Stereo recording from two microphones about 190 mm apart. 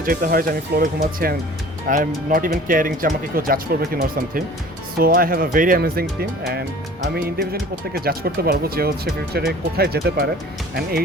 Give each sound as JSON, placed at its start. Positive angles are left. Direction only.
{"t": 0.0, "sound": "speech", "side_deg": -50}
{"t": 7.9, "sound": "speech", "side_deg": -50}